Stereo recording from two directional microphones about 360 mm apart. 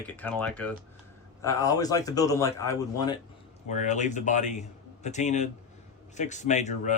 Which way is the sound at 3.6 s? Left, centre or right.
Centre.